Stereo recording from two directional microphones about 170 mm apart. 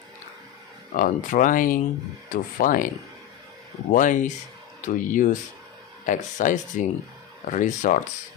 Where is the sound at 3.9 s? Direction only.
50° left (ahead or behind).